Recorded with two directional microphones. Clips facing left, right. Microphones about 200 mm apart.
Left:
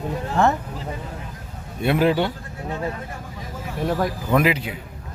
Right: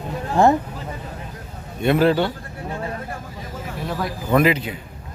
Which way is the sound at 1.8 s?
10° left (ahead or behind).